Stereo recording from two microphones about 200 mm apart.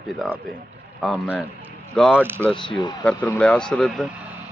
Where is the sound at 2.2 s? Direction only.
10° right (ahead or behind).